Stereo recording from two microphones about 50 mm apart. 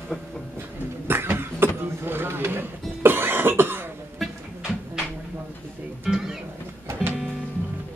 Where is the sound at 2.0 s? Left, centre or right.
Right.